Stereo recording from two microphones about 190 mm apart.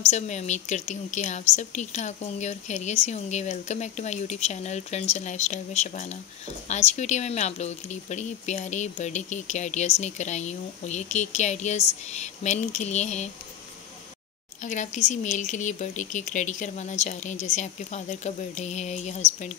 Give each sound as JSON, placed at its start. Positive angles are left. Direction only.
{"t": 0.1, "sound": "speech", "side_deg": 35}
{"t": 14.6, "sound": "speech", "side_deg": 40}